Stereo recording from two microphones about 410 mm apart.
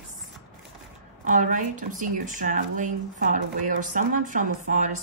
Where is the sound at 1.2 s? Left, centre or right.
Centre.